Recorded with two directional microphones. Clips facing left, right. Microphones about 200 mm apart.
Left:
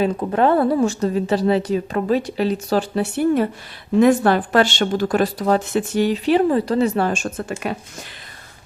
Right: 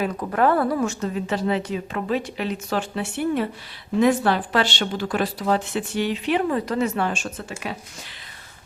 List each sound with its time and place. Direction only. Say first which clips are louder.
0.0 s speech: left 4 dB; 25° left (ahead or behind); by 7.5 s 50° left (ahead or behind)